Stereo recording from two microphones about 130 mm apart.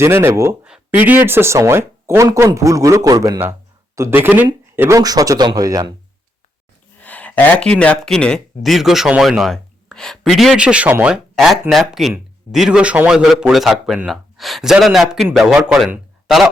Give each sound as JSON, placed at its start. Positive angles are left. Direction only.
{"t": 0.0, "sound": "speech", "side_deg": -20}
{"t": 7.0, "sound": "a man's voice", "side_deg": 10}